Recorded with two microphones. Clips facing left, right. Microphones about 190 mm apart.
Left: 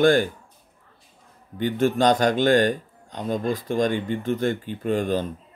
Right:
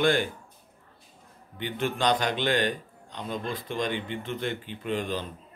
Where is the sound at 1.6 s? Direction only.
45° left (ahead or behind).